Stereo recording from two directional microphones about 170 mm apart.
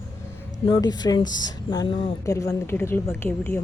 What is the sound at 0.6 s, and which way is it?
Speech, 25° left (ahead or behind).